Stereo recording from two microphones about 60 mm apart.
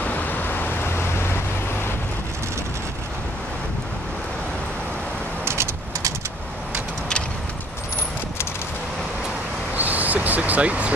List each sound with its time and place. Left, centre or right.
0.0 s vehicle: left
5.4 s vehicle: right
9.8 s a sound: right